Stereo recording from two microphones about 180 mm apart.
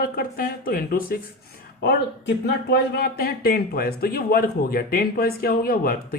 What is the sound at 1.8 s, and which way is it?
Speech, 65° left (ahead or behind).